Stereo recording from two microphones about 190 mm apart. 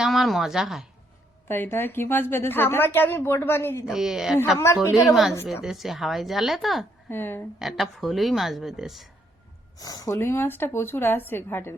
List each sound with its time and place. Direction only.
0.0 s speech: centre (ahead or behind)
1.5 s a woman's voice: 10° left (ahead or behind)
3.8 s speech: centre (ahead or behind)
4.5 s a woman's voice: 15° left (ahead or behind)
5.0 s speech: centre (ahead or behind)
7.1 s a woman's voice: 10° left (ahead or behind)
7.6 s speech: centre (ahead or behind)
9.7 s a woman's voice: 20° left (ahead or behind)